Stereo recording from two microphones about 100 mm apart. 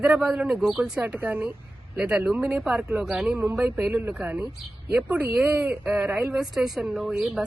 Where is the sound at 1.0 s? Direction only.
20° right (ahead or behind).